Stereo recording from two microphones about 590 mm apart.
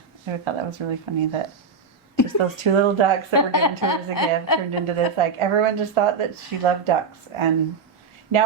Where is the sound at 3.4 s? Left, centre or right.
Left.